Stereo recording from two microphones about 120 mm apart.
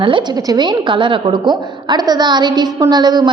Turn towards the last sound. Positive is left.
turn(degrees=-35)  # may be behind; listen again after turning